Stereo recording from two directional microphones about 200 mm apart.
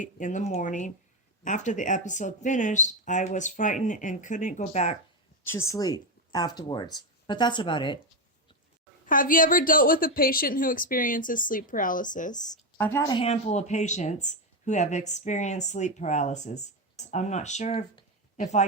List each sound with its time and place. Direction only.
0.0 s speech: 40° left (ahead or behind)
5.4 s a sound: 10° left (ahead or behind)
5.7 s speech: 20° left (ahead or behind)
9.0 s a woman's voice: 45° left (ahead or behind)
12.7 s speech: 10° left (ahead or behind); by 18.6 s 35° left (ahead or behind)